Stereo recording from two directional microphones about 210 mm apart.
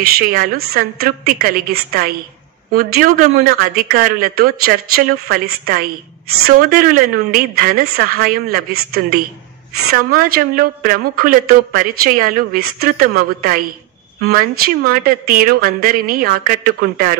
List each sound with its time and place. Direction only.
0.0 s speech: 45° right (ahead or behind)